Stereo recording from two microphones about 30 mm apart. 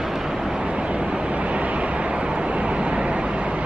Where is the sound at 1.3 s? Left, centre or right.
Right.